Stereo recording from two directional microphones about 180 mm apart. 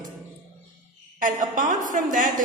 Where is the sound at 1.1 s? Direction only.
50° right (ahead or behind).